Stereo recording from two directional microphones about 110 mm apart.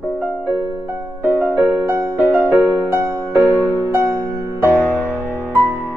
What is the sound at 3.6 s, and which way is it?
Music, 20° right (ahead or behind).